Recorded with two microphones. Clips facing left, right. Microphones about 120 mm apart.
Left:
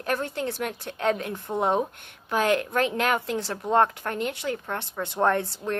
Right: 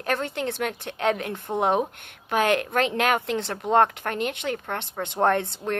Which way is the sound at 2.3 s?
65° right (ahead or behind).